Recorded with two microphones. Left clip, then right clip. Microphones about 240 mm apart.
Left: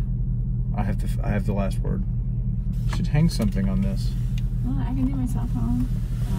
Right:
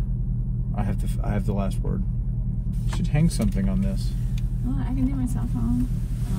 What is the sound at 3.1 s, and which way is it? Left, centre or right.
Speech, centre.